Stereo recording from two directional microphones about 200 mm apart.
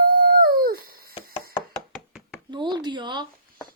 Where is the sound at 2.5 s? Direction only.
20° right (ahead or behind).